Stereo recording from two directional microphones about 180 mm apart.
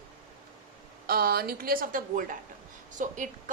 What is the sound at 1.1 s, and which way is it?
A woman's voice, 55° right (ahead or behind).